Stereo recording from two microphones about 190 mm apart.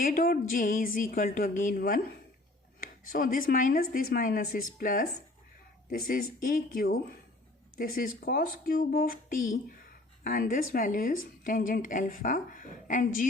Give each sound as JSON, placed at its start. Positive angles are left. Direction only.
{"t": 0.0, "sound": "a woman's voice", "side_deg": 45}
{"t": 6.4, "sound": "a woman's voice", "side_deg": 50}